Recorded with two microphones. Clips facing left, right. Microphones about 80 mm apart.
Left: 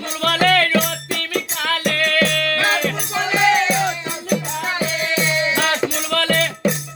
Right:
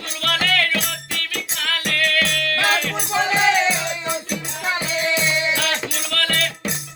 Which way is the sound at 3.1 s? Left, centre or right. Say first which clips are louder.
Right 2 dB; right.